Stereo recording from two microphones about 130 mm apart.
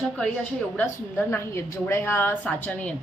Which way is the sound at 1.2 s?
20° left (ahead or behind).